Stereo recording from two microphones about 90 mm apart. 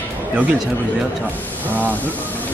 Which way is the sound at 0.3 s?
15° right (ahead or behind).